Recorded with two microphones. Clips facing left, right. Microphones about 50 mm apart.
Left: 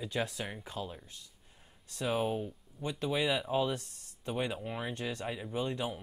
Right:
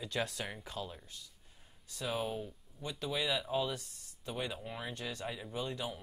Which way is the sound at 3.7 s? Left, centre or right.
Left.